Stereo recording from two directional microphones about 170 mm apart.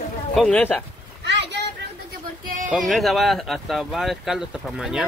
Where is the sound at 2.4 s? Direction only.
50° right (ahead or behind).